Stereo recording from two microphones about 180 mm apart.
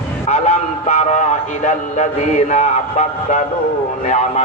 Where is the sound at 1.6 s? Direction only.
40° left (ahead or behind).